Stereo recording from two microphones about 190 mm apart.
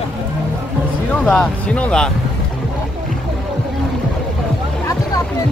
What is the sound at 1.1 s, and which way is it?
Speech, 5° left (ahead or behind).